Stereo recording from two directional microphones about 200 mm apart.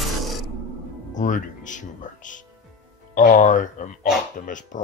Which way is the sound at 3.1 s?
40° left (ahead or behind).